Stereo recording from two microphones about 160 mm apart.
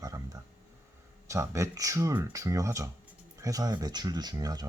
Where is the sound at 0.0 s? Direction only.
20° right (ahead or behind).